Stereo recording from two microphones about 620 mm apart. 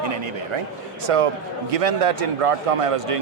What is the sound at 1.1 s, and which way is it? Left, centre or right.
A man's voice, right.